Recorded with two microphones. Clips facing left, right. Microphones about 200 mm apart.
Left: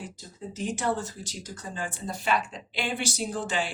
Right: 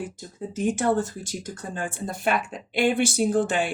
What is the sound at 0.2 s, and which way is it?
Speech, 50° right (ahead or behind).